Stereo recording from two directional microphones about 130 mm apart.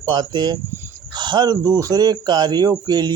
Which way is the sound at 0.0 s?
35° right (ahead or behind).